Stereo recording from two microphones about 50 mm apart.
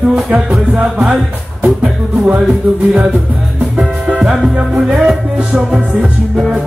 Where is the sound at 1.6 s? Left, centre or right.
Right.